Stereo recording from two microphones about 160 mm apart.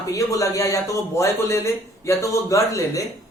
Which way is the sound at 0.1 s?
20° left (ahead or behind).